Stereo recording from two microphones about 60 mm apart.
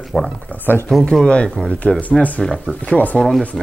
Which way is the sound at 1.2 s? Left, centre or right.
Centre.